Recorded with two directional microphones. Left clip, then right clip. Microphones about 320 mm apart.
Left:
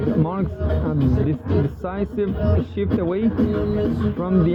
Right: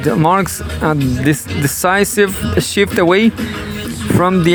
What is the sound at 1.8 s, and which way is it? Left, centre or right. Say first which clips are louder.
Speech: right 13 dB; right.